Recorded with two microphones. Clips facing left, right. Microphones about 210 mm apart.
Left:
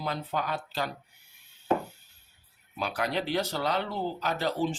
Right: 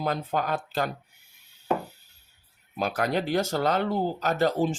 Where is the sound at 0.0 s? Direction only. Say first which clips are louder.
Right 4 dB; 50° right (ahead or behind).